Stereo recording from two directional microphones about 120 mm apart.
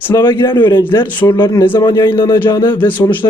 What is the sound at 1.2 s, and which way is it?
Speech, 25° left (ahead or behind).